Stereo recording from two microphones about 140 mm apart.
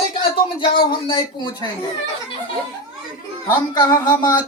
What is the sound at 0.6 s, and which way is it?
Speech, 35° left (ahead or behind).